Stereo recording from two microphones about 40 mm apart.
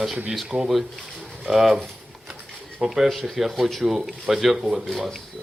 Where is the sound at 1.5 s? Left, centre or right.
Centre.